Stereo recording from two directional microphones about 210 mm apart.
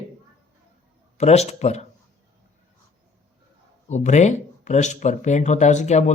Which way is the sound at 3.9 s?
35° left (ahead or behind).